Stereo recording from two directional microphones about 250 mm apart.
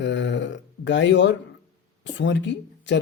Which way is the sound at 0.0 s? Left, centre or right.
Left.